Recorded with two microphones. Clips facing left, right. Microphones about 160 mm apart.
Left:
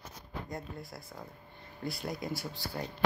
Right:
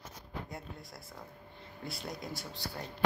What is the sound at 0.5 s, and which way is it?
Speech, centre (ahead or behind).